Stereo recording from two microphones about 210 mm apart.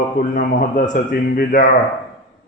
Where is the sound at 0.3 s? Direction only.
40° left (ahead or behind).